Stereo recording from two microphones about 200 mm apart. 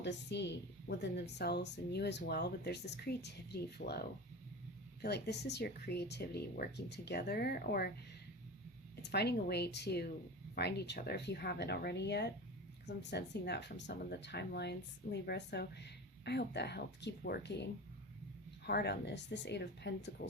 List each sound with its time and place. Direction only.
0.0 s speech: 60° left (ahead or behind)
5.0 s speech: 55° left (ahead or behind)
9.0 s speech: 55° left (ahead or behind)